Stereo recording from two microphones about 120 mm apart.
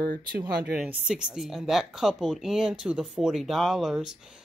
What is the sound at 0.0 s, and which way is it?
Speech, 35° right (ahead or behind).